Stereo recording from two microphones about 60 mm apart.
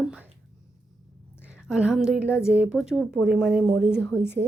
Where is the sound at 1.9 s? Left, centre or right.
Centre.